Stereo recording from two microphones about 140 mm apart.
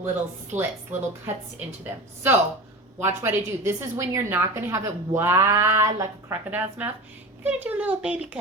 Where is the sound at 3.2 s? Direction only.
15° right (ahead or behind).